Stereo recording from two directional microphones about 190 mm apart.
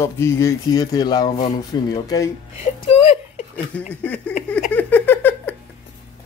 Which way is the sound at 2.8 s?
30° left (ahead or behind).